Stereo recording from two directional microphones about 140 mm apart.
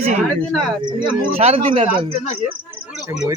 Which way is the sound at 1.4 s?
45° right (ahead or behind).